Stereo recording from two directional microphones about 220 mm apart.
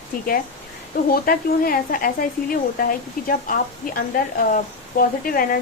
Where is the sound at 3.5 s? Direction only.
40° left (ahead or behind).